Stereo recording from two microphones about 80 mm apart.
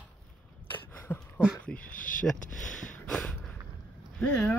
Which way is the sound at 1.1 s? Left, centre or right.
Left.